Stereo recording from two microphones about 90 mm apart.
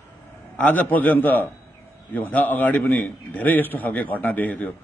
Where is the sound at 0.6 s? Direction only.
20° left (ahead or behind).